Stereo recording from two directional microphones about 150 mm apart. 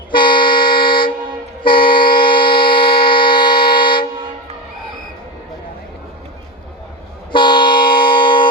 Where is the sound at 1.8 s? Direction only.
75° left (ahead or behind).